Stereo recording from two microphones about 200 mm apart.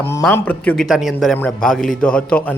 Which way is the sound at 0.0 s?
10° left (ahead or behind).